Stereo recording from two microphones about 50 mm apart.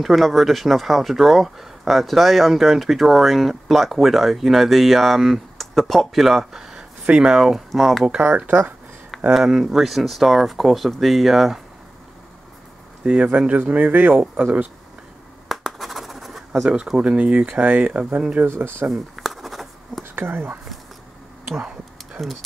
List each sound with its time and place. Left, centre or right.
0.0 s speech: centre
9.3 s speech: centre
13.0 s speech: centre
13.5 s speech: right
15.4 s scratch: centre
16.6 s speech: centre
18.4 s speech: right
18.9 s writing: centre
20.0 s speech: right
21.5 s a sound: centre